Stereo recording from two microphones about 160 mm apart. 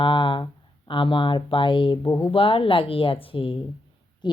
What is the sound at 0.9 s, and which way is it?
Speech, 30° left (ahead or behind).